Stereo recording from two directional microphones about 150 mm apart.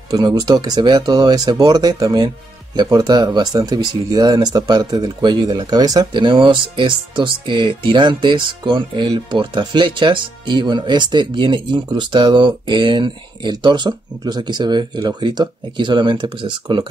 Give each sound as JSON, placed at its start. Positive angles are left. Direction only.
{"t": 0.1, "sound": "speech", "side_deg": -25}